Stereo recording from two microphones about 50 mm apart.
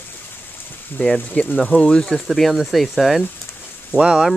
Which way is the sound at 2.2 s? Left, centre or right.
Centre.